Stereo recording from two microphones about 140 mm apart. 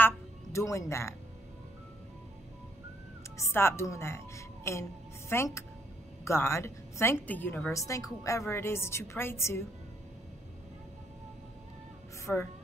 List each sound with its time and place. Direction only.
0.0 s a sound: 20° left (ahead or behind)
3.5 s a woman's voice: 20° left (ahead or behind)
12.3 s a woman's voice: 10° left (ahead or behind)